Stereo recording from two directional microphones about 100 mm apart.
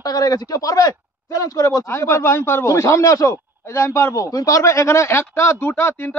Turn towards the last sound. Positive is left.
turn(degrees=25)  # may be behind; listen again after turning